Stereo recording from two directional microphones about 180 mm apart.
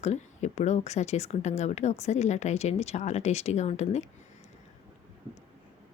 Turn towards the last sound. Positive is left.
turn(degrees=35)  # may be behind; listen again after turning